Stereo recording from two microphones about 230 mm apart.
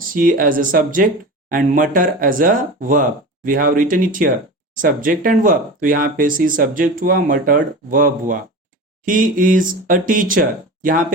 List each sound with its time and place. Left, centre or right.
0.1 s speech: right